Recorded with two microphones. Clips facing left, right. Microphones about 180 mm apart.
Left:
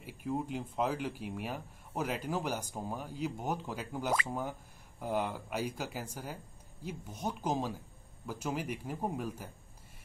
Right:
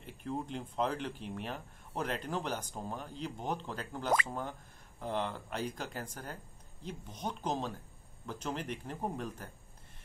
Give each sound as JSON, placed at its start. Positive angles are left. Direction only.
{"t": 0.0, "sound": "speech", "side_deg": 5}